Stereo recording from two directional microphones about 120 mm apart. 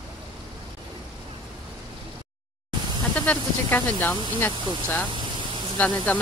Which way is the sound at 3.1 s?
15° left (ahead or behind).